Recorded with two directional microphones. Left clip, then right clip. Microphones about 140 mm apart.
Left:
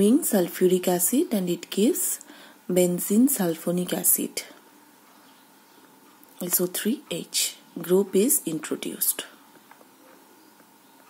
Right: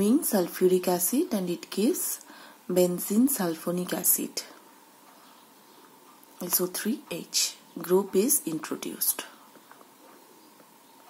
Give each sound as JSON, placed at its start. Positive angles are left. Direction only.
{"t": 0.3, "sound": "a woman's voice", "side_deg": 20}
{"t": 2.3, "sound": "a sound", "side_deg": 20}
{"t": 3.3, "sound": "a woman's voice", "side_deg": 25}
{"t": 6.3, "sound": "a woman's voice", "side_deg": 20}